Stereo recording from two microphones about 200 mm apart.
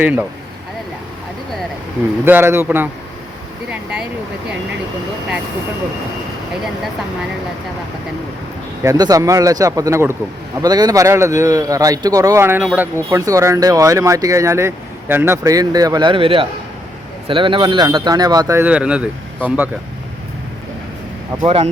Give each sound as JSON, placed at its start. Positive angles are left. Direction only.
{"t": 0.0, "sound": "a man's voice", "side_deg": -10}
{"t": 2.2, "sound": "a man's voice", "side_deg": -10}
{"t": 8.8, "sound": "a man's voice", "side_deg": -15}
{"t": 21.4, "sound": "speech", "side_deg": -30}